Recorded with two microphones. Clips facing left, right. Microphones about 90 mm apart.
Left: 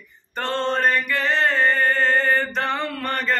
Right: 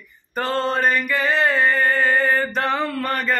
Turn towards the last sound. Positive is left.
turn(degrees=-5)  # may be behind; listen again after turning